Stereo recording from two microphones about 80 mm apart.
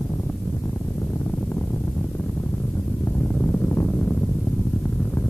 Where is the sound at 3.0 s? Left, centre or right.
Left.